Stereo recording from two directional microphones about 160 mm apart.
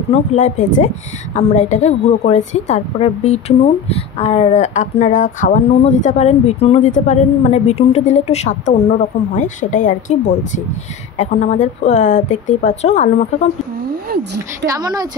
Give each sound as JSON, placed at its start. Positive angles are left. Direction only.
{"t": 0.1, "sound": "a woman's voice", "side_deg": 45}
{"t": 14.0, "sound": "a woman's voice", "side_deg": -75}
{"t": 14.7, "sound": "a woman's voice", "side_deg": -25}